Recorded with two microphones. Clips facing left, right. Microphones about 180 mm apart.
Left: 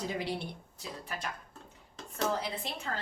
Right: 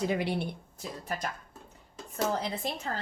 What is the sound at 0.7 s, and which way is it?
Speech, 45° right (ahead or behind).